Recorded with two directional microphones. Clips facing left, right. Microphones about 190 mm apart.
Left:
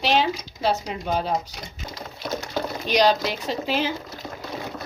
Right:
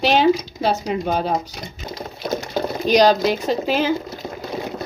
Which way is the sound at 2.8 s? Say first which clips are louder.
Right 6 dB; 40° right (ahead or behind).